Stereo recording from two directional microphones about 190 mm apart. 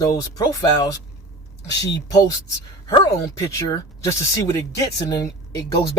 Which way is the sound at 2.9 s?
20° left (ahead or behind).